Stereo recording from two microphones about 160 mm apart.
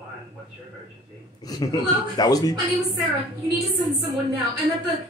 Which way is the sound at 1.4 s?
25° left (ahead or behind).